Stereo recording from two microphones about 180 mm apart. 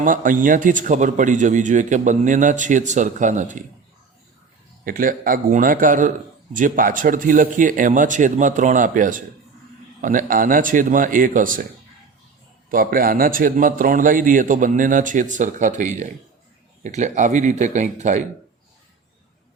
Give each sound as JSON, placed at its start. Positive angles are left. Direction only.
{"t": 0.0, "sound": "a man's voice", "side_deg": -50}
{"t": 4.9, "sound": "a man's voice", "side_deg": -50}
{"t": 12.7, "sound": "a man's voice", "side_deg": -50}